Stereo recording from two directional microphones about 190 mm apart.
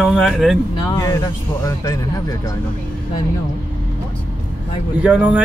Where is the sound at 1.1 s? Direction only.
15° left (ahead or behind).